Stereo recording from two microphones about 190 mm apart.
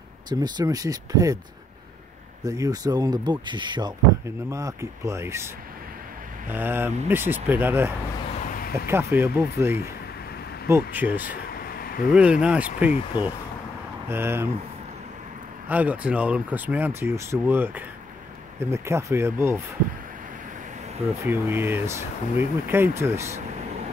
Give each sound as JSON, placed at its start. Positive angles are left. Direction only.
{"t": 0.3, "sound": "speech", "side_deg": -20}
{"t": 2.4, "sound": "speech", "side_deg": -20}
{"t": 6.5, "sound": "speech", "side_deg": -10}
{"t": 8.5, "sound": "a sound", "side_deg": 50}
{"t": 8.7, "sound": "speech", "side_deg": -10}
{"t": 11.7, "sound": "a sound", "side_deg": 50}
{"t": 12.1, "sound": "speech", "side_deg": -5}
{"t": 14.0, "sound": "speech", "side_deg": -10}
{"t": 15.7, "sound": "speech", "side_deg": -10}
{"t": 21.2, "sound": "speech", "side_deg": -10}